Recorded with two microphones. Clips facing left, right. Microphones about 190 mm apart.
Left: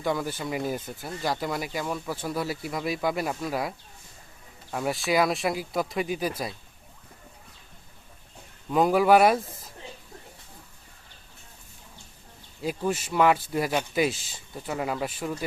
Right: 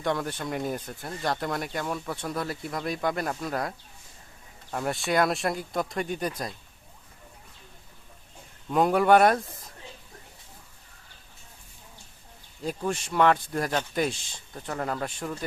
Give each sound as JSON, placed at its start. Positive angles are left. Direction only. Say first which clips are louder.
{"t": 0.0, "sound": "speech", "louder": "left 1 dB", "side_deg": 5}
{"t": 8.7, "sound": "speech", "louder": "left 1 dB", "side_deg": 0}
{"t": 12.6, "sound": "speech", "louder": "left 2 dB", "side_deg": 5}